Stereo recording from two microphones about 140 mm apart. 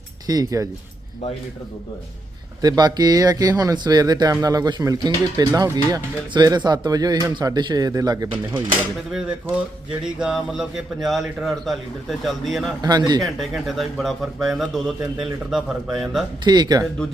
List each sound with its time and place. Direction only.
0.3 s speech: 25° right (ahead or behind)
2.6 s speech: 30° right (ahead or behind)
10.0 s speech: 5° right (ahead or behind)
12.8 s speech: 30° right (ahead or behind)
13.7 s speech: centre (ahead or behind)
16.4 s speech: 30° right (ahead or behind)